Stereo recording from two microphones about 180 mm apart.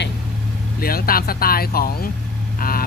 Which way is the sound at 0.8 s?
55° left (ahead or behind).